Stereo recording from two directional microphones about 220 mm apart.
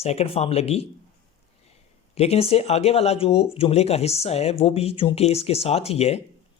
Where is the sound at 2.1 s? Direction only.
30° left (ahead or behind).